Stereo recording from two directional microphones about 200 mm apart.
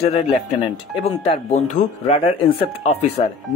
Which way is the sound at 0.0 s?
30° left (ahead or behind).